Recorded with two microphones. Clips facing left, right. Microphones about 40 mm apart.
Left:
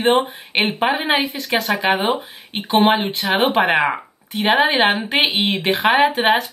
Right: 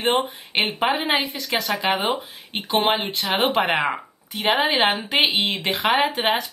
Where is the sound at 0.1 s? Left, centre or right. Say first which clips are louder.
Left 4 dB; centre.